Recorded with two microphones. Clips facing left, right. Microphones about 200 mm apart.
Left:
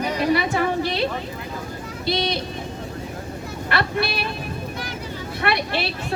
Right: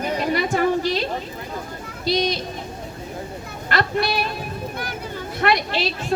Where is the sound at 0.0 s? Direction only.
50° right (ahead or behind).